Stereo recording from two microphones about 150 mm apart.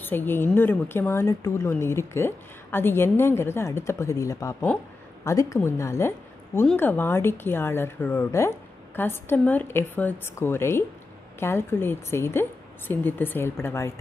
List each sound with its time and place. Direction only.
0.0 s a woman's voice: 15° left (ahead or behind)